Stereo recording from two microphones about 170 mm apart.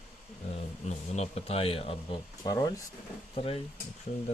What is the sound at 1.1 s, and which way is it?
Speech, 40° left (ahead or behind).